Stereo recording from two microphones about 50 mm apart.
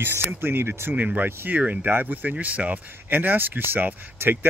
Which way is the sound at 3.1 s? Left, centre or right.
Right.